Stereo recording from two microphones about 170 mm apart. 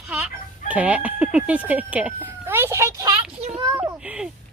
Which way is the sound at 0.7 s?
10° right (ahead or behind).